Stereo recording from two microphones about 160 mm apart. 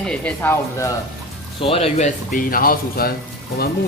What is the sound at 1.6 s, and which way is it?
A man's voice, 35° left (ahead or behind).